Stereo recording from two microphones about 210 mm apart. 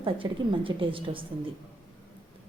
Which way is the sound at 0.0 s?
25° right (ahead or behind).